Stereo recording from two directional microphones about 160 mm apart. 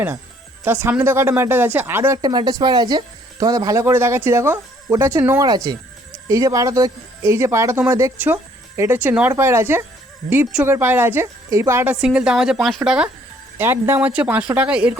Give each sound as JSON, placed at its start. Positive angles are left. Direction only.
{"t": 0.6, "sound": "speech", "side_deg": -15}
{"t": 2.2, "sound": "speech", "side_deg": -25}
{"t": 13.6, "sound": "speech", "side_deg": -15}